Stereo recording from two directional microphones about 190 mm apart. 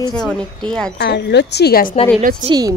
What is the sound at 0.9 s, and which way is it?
A woman's voice, 60° left (ahead or behind).